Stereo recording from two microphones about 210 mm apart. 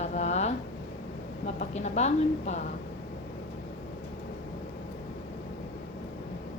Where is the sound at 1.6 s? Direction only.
35° left (ahead or behind).